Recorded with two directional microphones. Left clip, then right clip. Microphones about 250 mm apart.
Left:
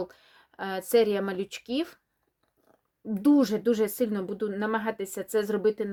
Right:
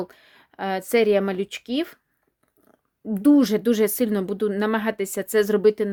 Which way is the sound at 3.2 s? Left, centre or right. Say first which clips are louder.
Right 5 dB; right.